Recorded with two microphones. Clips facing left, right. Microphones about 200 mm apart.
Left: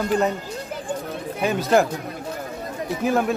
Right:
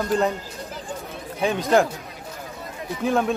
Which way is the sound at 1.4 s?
5° left (ahead or behind).